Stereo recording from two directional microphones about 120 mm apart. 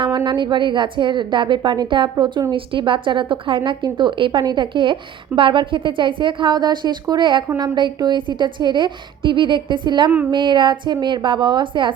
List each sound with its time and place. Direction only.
0.3 s a woman's voice: 40° right (ahead or behind)